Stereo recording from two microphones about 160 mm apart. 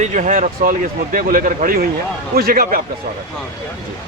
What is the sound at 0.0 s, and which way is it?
Speech, 50° right (ahead or behind).